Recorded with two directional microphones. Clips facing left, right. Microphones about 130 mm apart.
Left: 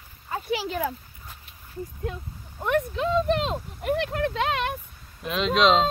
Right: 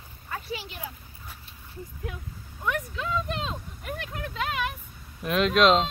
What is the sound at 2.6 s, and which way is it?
Speech, 35° left (ahead or behind).